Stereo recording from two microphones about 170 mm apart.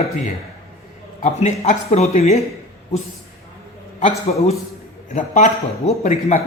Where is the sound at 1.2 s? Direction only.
45° left (ahead or behind).